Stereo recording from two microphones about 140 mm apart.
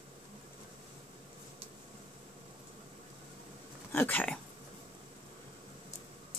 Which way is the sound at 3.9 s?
10° left (ahead or behind).